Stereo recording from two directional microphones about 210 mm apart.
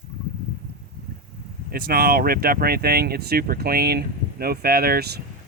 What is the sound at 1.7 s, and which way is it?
Speech, 45° right (ahead or behind).